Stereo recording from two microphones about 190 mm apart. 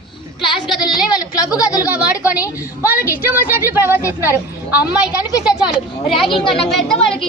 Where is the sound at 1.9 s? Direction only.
5° right (ahead or behind).